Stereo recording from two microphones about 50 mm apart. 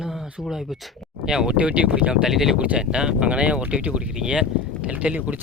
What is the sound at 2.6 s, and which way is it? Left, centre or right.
Speech, right.